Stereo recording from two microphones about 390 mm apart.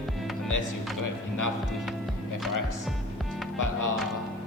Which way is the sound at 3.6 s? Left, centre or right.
Left.